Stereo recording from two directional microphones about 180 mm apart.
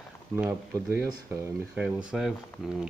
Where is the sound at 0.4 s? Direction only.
10° right (ahead or behind).